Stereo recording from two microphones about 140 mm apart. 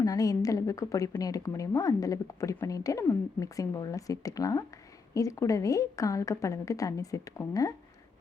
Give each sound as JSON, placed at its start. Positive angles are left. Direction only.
{"t": 0.0, "sound": "a woman's voice", "side_deg": 25}